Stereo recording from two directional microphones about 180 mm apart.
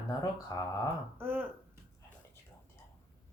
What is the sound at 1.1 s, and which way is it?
Speech, 10° right (ahead or behind).